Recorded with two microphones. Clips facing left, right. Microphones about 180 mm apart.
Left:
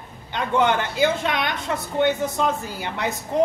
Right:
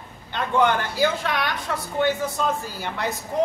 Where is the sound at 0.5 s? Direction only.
20° left (ahead or behind).